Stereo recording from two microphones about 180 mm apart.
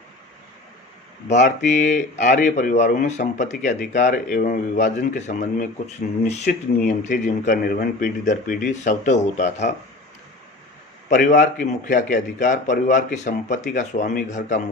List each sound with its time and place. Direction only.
1.3 s speech: 40° left (ahead or behind)
6.5 s speech: 55° left (ahead or behind)
6.8 s speech: 40° left (ahead or behind)
11.1 s speech: 45° left (ahead or behind)